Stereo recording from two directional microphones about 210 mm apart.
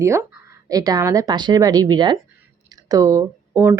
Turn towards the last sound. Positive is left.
turn(degrees=-10)  # may be behind; listen again after turning